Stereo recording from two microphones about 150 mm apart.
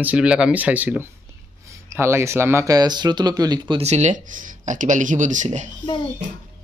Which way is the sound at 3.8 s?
50° right (ahead or behind).